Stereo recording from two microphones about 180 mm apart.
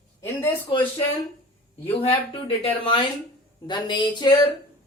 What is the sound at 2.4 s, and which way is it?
Speech, 30° left (ahead or behind).